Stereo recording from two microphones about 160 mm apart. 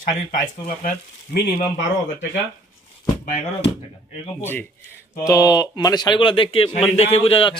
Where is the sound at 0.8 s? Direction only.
55° left (ahead or behind).